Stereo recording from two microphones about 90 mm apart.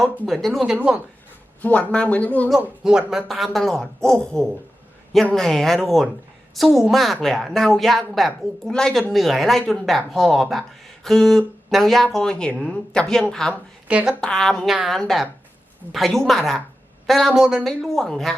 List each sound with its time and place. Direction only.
0.3 s speech: 5° left (ahead or behind)
0.8 s speech: 15° right (ahead or behind)
1.6 s speech: 15° left (ahead or behind)
2.6 s speech: 10° right (ahead or behind)
13.8 s speech: 10° right (ahead or behind)
14.2 s speech: 10° left (ahead or behind)